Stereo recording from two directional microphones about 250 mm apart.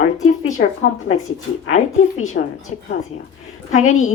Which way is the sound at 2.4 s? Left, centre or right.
Left.